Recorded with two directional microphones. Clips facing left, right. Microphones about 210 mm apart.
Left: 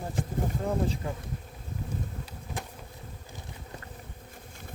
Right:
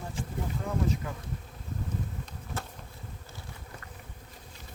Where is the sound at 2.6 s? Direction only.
15° left (ahead or behind).